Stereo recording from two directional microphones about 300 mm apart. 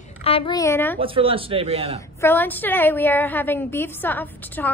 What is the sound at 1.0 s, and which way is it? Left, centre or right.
Speech, centre.